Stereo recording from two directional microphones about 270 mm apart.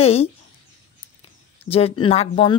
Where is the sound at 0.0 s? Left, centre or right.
Left.